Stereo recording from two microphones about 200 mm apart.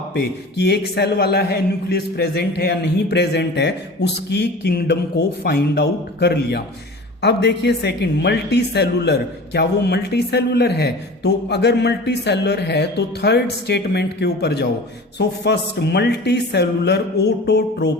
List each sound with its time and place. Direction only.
0.1 s a woman's voice: 55° left (ahead or behind)